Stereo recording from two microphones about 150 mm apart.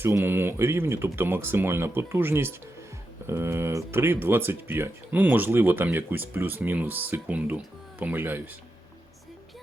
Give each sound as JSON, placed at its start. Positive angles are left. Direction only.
{"t": 0.0, "sound": "speech", "side_deg": -15}